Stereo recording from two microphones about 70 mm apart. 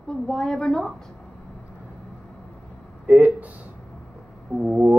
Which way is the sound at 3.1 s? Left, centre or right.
Right.